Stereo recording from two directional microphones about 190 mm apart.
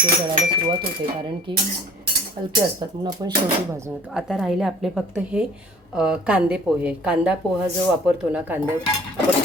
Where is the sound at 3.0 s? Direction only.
25° right (ahead or behind).